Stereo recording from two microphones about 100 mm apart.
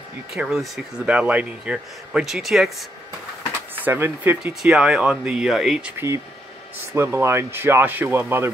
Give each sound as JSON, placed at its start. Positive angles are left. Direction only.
{"t": 0.3, "sound": "speech", "side_deg": -5}
{"t": 3.7, "sound": "speech", "side_deg": -20}
{"t": 4.6, "sound": "speech", "side_deg": -10}
{"t": 5.9, "sound": "speech", "side_deg": -30}